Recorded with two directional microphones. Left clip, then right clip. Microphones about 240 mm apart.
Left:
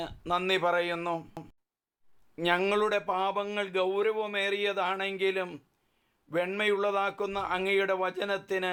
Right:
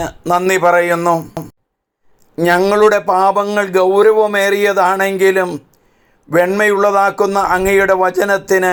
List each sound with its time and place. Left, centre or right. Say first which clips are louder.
0.0 s a man's voice: right 16 dB; centre